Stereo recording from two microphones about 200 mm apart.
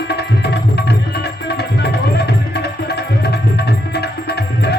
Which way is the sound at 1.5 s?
55° left (ahead or behind).